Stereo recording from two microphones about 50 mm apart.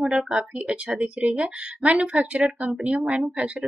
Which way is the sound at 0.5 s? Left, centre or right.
Right.